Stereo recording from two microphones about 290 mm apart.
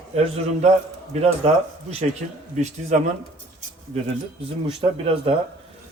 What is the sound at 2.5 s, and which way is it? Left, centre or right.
Speech, right.